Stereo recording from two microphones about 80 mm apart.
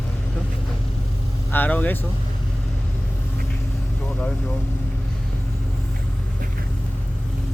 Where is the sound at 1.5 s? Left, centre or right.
Left.